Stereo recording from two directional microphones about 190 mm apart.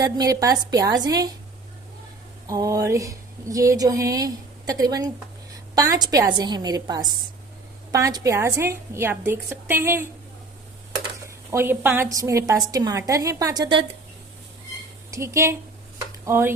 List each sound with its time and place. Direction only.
0.0 s speech: 20° right (ahead or behind)
2.5 s a woman's voice: 20° right (ahead or behind)
11.5 s a woman's voice: 10° right (ahead or behind)
15.1 s speech: 15° right (ahead or behind)